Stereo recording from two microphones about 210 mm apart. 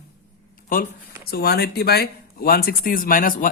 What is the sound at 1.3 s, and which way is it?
Speech, 50° left (ahead or behind).